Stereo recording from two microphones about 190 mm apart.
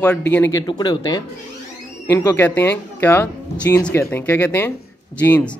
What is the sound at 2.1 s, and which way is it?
Speech, 10° left (ahead or behind).